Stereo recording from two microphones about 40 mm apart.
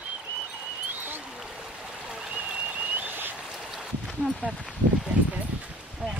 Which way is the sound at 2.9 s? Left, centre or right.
Right.